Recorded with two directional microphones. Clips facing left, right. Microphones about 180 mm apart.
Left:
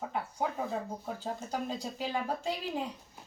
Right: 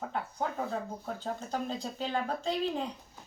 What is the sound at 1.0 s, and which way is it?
Speech, 10° left (ahead or behind).